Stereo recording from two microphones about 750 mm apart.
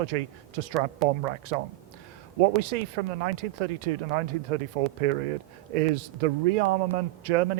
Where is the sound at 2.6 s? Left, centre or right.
Right.